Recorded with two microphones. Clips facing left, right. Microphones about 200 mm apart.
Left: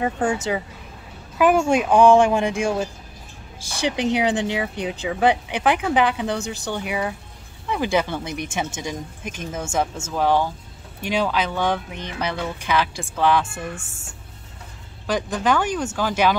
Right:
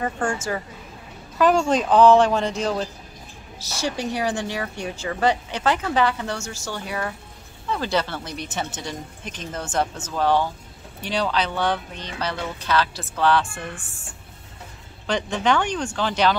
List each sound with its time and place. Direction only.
0.0 s speech: 5° left (ahead or behind)
0.4 s speech: 20° left (ahead or behind)
13.7 s speech: 25° left (ahead or behind)
15.0 s speech: 5° left (ahead or behind)